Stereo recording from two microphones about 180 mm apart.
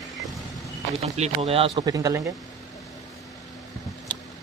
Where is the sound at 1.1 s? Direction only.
35° right (ahead or behind); by 2.2 s 15° right (ahead or behind).